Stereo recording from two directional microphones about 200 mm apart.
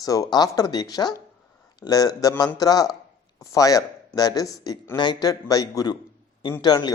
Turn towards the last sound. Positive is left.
turn(degrees=20)  # may be behind; listen again after turning